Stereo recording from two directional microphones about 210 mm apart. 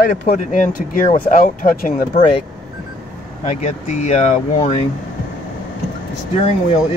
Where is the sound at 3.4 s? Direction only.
30° left (ahead or behind).